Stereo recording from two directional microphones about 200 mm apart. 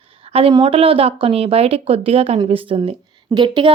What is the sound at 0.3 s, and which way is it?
Speech, 30° right (ahead or behind).